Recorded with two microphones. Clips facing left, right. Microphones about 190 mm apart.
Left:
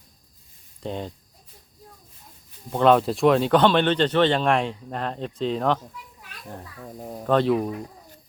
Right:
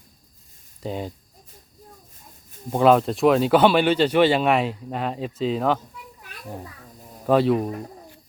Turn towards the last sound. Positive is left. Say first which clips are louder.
# right 2 dB
turn(degrees=-5)  # may be behind; listen again after turning